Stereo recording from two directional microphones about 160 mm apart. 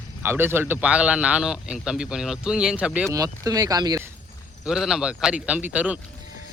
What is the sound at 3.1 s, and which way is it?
Speech, 20° right (ahead or behind).